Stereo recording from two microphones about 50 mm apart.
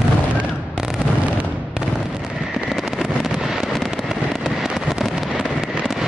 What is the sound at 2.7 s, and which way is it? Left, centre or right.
Fireworks, centre.